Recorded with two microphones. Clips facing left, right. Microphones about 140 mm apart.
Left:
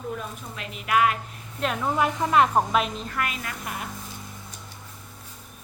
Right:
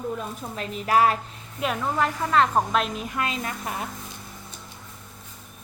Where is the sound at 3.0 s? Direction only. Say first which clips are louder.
Right 2 dB; 20° right (ahead or behind).